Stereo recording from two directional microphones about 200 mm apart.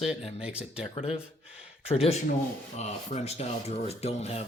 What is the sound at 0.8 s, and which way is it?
Speech, 30° left (ahead or behind).